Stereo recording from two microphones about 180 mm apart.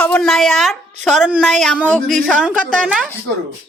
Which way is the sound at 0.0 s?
5° left (ahead or behind).